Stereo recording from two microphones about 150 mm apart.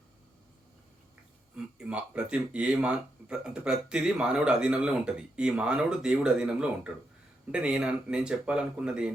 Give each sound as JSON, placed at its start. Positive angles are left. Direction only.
{"t": 1.5, "sound": "speech", "side_deg": -5}